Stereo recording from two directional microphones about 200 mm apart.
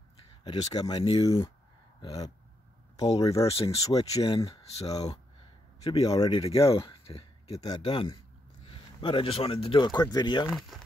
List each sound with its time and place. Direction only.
0.4 s speech: 20° left (ahead or behind)
2.0 s a sound: 20° left (ahead or behind)
3.0 s speech: 25° left (ahead or behind)
3.8 s speech: 20° left (ahead or behind)
7.6 s speech: 20° left (ahead or behind)